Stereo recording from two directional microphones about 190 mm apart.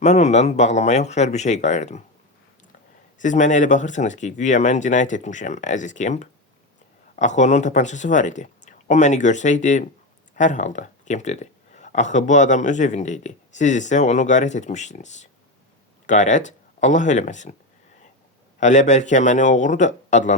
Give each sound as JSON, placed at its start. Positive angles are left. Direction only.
{"t": 0.0, "sound": "speech", "side_deg": 35}
{"t": 3.2, "sound": "speech", "side_deg": 40}
{"t": 18.6, "sound": "speech", "side_deg": 40}